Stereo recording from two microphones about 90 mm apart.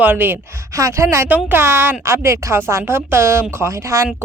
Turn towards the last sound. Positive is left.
turn(degrees=-35)  # may be behind; listen again after turning